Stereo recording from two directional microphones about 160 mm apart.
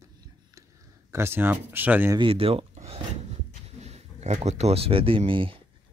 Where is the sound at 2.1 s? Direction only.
35° right (ahead or behind).